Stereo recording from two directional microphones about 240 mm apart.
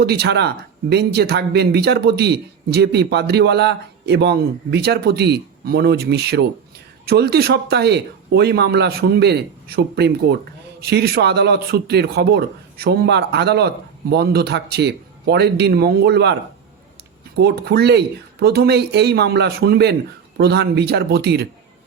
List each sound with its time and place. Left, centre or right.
0.0 s speech: right
17.4 s speech: right